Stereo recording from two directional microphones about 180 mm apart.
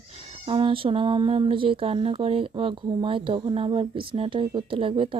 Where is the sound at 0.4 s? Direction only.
30° right (ahead or behind).